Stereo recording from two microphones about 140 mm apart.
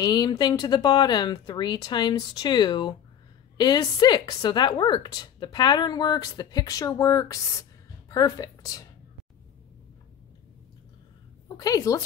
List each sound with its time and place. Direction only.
0.0 s a woman's voice: 30° left (ahead or behind)
11.4 s a woman's voice: 25° left (ahead or behind)